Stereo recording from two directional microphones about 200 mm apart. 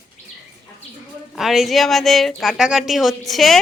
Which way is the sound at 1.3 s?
Centre (ahead or behind).